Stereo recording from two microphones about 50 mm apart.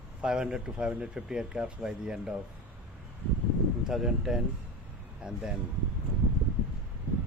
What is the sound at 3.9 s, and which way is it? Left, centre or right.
Speech, centre.